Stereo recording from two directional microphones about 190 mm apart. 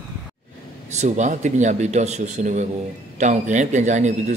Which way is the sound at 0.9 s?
35° right (ahead or behind).